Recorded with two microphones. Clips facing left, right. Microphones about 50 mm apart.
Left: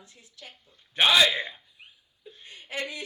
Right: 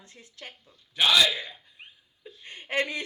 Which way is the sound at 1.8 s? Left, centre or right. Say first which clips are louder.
Right 3 dB; right.